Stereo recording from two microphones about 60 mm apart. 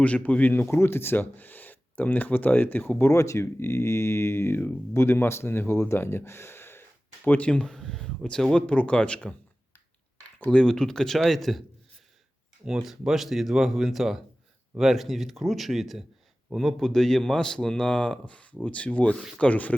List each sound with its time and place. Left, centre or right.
0.0 s speech: left
0.6 s speech: left
3.0 s speech: left
7.3 s speech: left
10.5 s a man's voice: centre
12.6 s a man's voice: centre; by 19.7 s left